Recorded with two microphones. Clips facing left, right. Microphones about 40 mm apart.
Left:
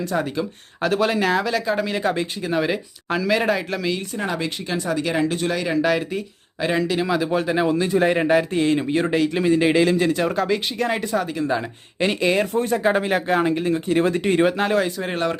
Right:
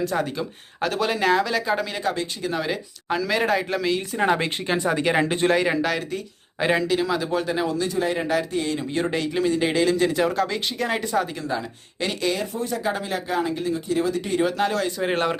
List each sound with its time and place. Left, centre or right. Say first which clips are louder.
0.0 s speech: left 1 dB; centre
4.4 s speech: right 1 dB; right
6.7 s speech: left 1 dB; centre
7.6 s speech: left 5 dB; left
8.9 s speech: left 5 dB; centre
10.1 s speech: left 2 dB; centre
11.4 s speech: left 4 dB; left
12.4 s speech: left 7 dB; left
14.8 s speech: right 1 dB; centre
15.1 s speech: right 1 dB; centre